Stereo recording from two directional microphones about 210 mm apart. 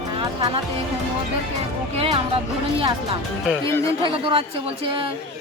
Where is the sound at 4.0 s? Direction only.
25° right (ahead or behind).